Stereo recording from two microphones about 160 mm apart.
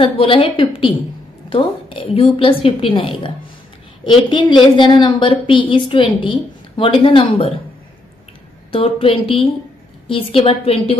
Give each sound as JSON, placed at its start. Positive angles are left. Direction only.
{"t": 0.0, "sound": "a woman's voice", "side_deg": 35}
{"t": 8.7, "sound": "a woman's voice", "side_deg": 35}